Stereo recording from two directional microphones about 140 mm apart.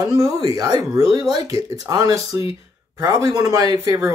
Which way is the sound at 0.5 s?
25° right (ahead or behind).